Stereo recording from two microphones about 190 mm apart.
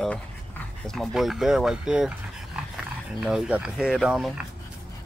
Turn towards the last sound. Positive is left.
turn(degrees=0)  # may be behind; listen again after turning